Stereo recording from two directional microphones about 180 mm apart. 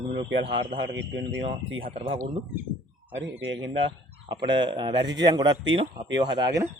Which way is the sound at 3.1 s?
90° right.